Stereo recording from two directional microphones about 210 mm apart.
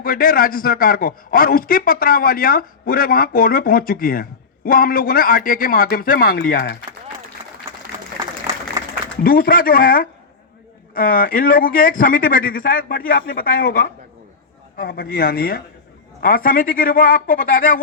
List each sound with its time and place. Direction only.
0.0 s a man's voice: 45° left (ahead or behind)
9.2 s a man's voice: 45° left (ahead or behind)